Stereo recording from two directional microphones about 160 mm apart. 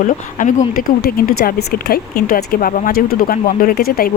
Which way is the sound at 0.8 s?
70° left (ahead or behind).